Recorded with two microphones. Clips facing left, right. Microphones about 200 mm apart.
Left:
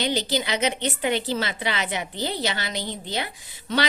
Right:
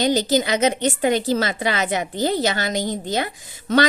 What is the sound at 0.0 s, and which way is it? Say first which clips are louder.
A woman's voice: right 6 dB; 45° right (ahead or behind).